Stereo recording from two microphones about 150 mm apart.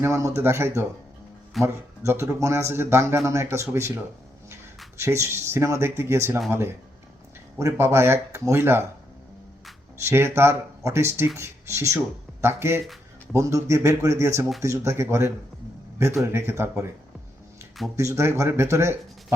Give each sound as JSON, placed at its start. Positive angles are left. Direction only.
{"t": 0.0, "sound": "speech", "side_deg": -20}
{"t": 4.9, "sound": "speech", "side_deg": -15}
{"t": 10.0, "sound": "speech", "side_deg": -15}
{"t": 17.9, "sound": "speech", "side_deg": -20}